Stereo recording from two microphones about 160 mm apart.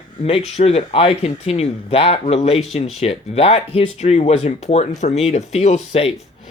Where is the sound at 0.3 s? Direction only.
40° left (ahead or behind).